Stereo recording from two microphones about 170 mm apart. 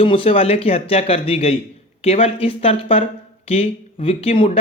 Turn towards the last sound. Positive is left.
turn(degrees=30)  # may be behind; listen again after turning